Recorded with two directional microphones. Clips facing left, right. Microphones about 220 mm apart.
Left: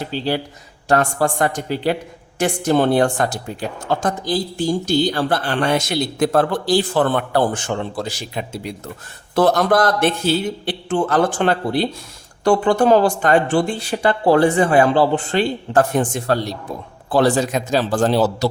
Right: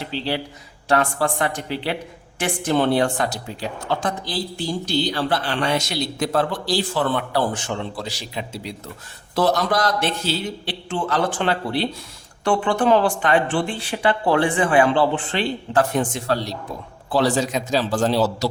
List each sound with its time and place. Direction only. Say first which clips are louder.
0.0 s speech: left 4 dB; 45° left (ahead or behind)